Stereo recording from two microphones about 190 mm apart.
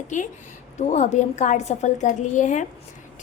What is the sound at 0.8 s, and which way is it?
A woman's voice, 40° left (ahead or behind).